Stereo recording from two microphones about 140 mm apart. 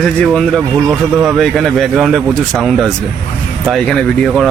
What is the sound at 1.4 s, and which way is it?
Speech, centre (ahead or behind).